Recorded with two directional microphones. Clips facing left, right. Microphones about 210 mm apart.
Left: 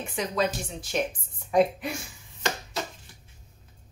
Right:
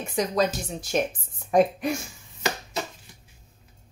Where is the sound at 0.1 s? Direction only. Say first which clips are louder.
Right 4 dB; 40° right (ahead or behind).